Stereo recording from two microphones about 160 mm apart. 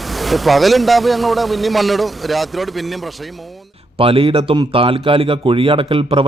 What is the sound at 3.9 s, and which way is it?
A man's voice, 35° right (ahead or behind).